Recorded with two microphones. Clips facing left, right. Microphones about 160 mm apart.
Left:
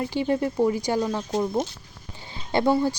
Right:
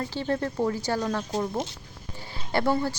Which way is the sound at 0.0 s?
15° left (ahead or behind).